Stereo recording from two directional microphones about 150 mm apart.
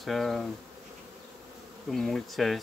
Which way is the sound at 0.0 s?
Centre (ahead or behind).